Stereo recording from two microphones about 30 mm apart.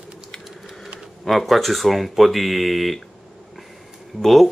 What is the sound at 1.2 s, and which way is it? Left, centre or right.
Speech, centre.